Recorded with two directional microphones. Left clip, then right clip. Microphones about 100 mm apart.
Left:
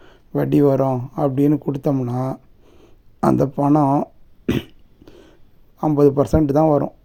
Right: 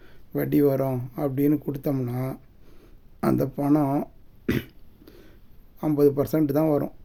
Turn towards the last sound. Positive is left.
turn(degrees=35)  # may be behind; listen again after turning